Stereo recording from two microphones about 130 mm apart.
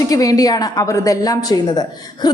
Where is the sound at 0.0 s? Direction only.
25° left (ahead or behind).